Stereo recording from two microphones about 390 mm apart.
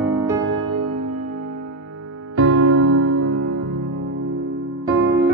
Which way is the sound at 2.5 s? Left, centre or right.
Right.